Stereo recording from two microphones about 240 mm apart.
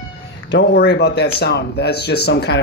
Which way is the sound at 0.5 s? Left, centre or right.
Left.